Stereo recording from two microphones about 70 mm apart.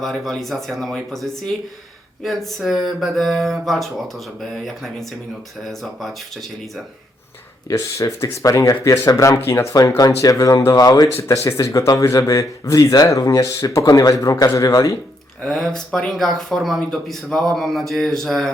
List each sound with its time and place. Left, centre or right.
0.0 s speech: centre
7.7 s speech: left
9.4 s speech: left
10.2 s speech: left
11.4 s speech: left
15.4 s speech: centre